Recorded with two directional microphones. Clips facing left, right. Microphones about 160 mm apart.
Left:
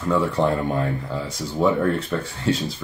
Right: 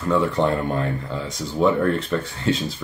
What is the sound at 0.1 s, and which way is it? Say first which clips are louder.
Speech: right 1 dB; 5° left (ahead or behind).